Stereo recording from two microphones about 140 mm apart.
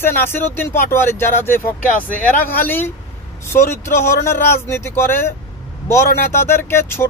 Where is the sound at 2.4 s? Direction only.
15° left (ahead or behind).